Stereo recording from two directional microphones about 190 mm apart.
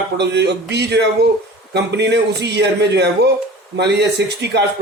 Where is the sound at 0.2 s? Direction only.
60° right (ahead or behind).